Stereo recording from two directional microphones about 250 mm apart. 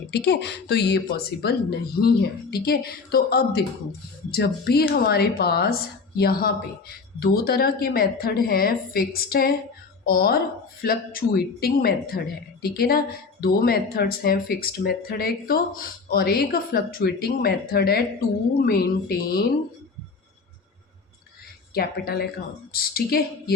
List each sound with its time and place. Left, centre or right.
0.1 s a woman's voice: left
21.8 s a woman's voice: left